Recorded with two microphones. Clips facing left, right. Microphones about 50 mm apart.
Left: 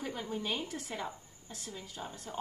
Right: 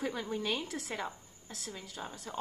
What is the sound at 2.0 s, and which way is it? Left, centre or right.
Speech, right.